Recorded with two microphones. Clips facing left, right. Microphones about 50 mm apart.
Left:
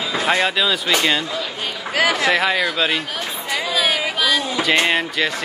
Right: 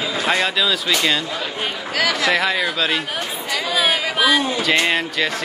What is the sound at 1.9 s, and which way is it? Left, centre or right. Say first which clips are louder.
Speech: left 3 dB; left.